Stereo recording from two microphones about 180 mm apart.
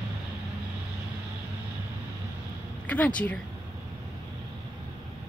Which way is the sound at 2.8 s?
10° left (ahead or behind).